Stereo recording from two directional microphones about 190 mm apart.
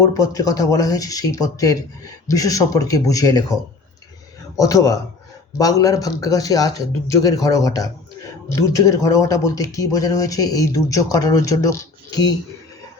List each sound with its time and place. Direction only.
0.1 s speech: 15° left (ahead or behind)